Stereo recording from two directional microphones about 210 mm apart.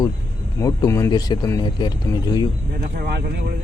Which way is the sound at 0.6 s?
15° left (ahead or behind).